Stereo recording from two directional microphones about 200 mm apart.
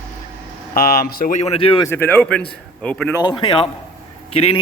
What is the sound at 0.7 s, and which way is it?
Speech, 45° left (ahead or behind).